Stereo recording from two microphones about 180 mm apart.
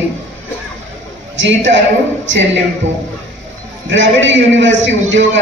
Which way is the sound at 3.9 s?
90° right.